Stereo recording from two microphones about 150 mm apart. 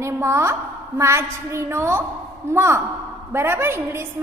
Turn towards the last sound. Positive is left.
turn(degrees=-15)  # may be behind; listen again after turning